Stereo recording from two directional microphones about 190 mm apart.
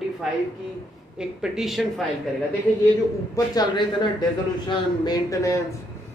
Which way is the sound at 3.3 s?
20° left (ahead or behind).